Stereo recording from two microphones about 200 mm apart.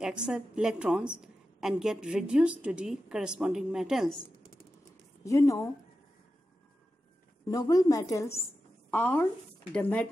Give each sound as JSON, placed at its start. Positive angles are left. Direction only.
{"t": 0.0, "sound": "a woman's voice", "side_deg": -5}
{"t": 5.2, "sound": "a woman's voice", "side_deg": 15}
{"t": 7.5, "sound": "a woman's voice", "side_deg": 20}